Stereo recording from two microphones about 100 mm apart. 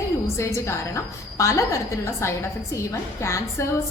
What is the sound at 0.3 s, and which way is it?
A woman's voice, 30° left (ahead or behind).